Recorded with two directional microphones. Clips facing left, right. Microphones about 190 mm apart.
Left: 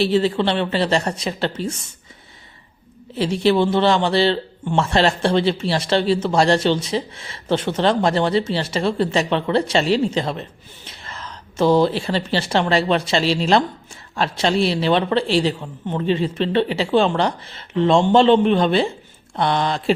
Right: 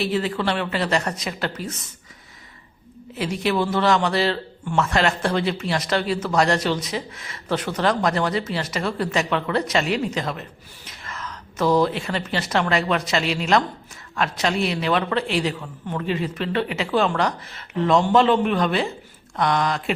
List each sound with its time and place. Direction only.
0.0 s a man's voice: 30° left (ahead or behind)
3.2 s a man's voice: 30° left (ahead or behind)